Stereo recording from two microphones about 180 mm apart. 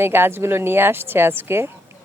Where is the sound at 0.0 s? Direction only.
10° right (ahead or behind).